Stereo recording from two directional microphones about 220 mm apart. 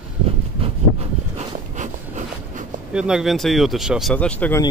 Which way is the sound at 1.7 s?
35° right (ahead or behind).